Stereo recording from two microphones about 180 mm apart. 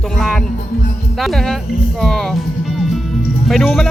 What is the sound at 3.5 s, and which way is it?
Speech, centre (ahead or behind).